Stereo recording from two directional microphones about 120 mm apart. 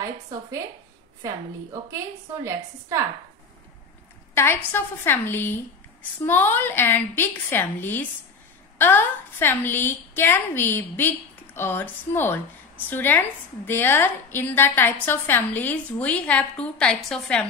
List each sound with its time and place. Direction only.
1.2 s a woman's voice: 25° right (ahead or behind)
4.4 s a woman's voice: 20° left (ahead or behind)